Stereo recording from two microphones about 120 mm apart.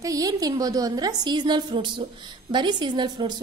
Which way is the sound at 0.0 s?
30° right (ahead or behind).